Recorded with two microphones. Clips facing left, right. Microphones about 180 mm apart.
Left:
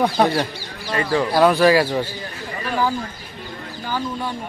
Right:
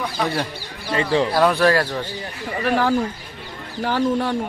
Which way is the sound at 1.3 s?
Centre (ahead or behind).